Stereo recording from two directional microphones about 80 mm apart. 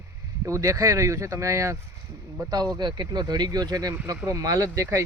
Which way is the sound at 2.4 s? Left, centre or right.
Right.